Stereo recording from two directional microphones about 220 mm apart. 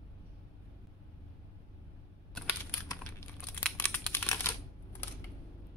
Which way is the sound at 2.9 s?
10° left (ahead or behind).